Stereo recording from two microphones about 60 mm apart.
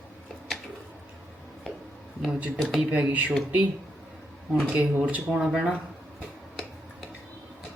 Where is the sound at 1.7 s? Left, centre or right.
Centre.